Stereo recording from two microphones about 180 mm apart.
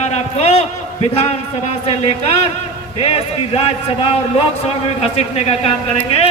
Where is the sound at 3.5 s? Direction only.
35° left (ahead or behind).